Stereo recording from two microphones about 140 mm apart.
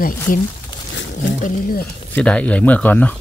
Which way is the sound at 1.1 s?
80° left.